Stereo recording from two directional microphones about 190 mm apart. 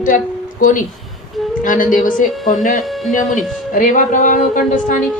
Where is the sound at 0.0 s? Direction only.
45° left (ahead or behind).